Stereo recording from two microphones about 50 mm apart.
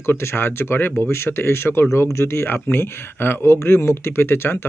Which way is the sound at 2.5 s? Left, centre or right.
Left.